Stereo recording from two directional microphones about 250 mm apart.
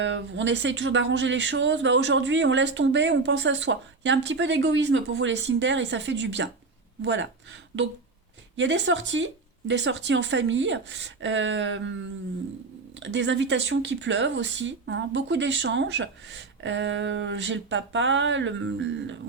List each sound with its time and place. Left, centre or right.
0.0 s speech: right
13.0 s speech: right